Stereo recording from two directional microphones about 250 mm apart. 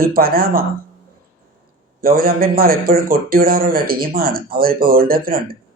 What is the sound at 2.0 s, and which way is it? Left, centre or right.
A man's voice, right.